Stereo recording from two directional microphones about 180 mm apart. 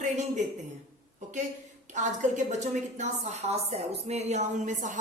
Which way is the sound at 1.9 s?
40° right (ahead or behind).